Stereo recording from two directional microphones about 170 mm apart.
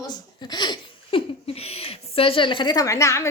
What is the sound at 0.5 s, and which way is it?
Laughter, 25° left (ahead or behind).